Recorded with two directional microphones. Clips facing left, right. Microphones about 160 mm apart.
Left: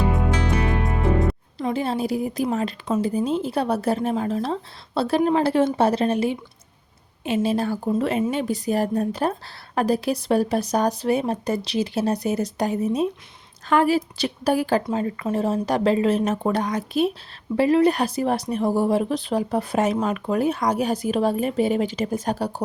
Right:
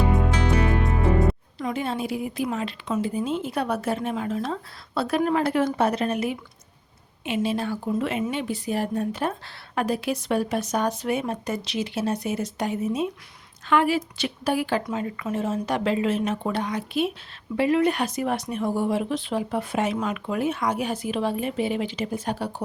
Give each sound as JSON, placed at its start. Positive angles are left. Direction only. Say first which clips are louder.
{"t": 1.5, "sound": "speech", "louder": "left 3 dB", "side_deg": 30}